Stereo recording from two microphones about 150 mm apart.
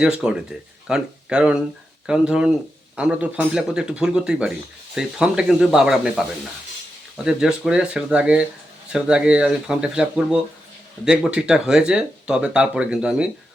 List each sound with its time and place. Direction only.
0.0 s speech: 5° right (ahead or behind)
7.3 s speech: 5° right (ahead or behind)